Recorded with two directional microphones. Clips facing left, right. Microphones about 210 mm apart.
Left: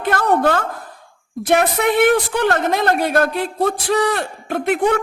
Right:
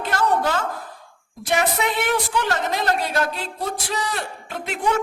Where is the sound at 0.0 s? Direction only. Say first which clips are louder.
Left 5 dB; 55° left (ahead or behind).